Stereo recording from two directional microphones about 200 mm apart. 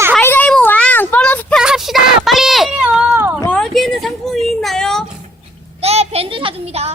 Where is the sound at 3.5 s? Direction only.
Centre (ahead or behind).